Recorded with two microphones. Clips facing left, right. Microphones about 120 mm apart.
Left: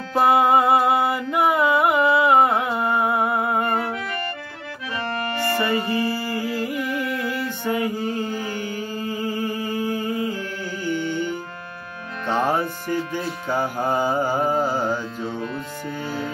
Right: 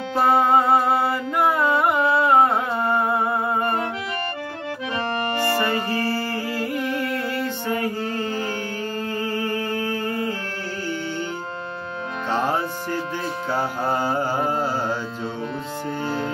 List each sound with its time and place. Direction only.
0.2 s music: 10° left (ahead or behind)
4.9 s accordion: 25° right (ahead or behind)
5.7 s music: 15° left (ahead or behind)
9.5 s mantra: 10° left (ahead or behind)
9.9 s a sound: 10° left (ahead or behind)
13.5 s music: 15° left (ahead or behind)